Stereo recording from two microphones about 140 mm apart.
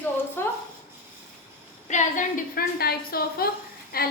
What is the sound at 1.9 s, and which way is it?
A woman's voice, 60° left (ahead or behind).